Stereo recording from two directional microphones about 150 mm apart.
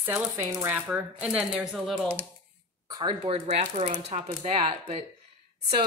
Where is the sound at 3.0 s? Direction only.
35° right (ahead or behind).